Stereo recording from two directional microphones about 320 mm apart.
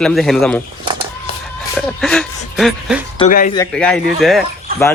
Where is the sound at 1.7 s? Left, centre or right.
Centre.